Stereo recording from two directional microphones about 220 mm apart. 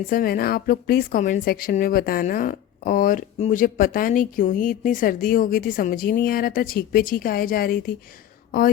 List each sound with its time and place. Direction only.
0.1 s a woman's voice: 40° left (ahead or behind)